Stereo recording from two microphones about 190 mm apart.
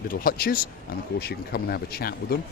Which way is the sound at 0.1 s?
50° left (ahead or behind).